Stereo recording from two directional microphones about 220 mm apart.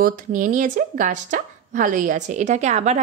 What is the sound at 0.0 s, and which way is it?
Speech, 40° right (ahead or behind).